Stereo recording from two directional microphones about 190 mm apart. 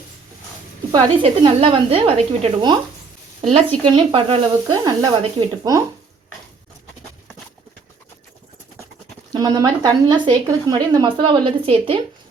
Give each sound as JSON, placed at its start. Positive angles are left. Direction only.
{"t": 0.9, "sound": "speech", "side_deg": -20}
{"t": 3.8, "sound": "speech", "side_deg": -30}
{"t": 9.3, "sound": "speech", "side_deg": -20}